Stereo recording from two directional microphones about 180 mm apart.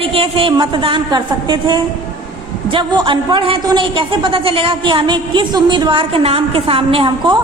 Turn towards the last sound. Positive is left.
turn(degrees=-30)  # may be behind; listen again after turning